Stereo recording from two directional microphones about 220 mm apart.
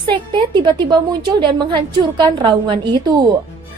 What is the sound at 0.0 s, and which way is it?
A woman's voice, 20° right (ahead or behind).